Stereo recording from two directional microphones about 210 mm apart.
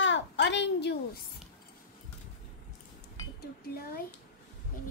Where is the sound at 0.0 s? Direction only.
60° left (ahead or behind).